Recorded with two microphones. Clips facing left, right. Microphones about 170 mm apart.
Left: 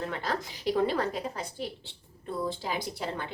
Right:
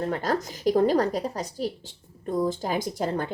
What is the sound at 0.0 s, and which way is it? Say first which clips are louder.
A woman's voice: right 6 dB; 40° right (ahead or behind).